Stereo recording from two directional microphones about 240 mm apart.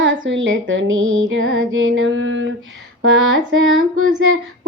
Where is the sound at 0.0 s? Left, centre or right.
Right.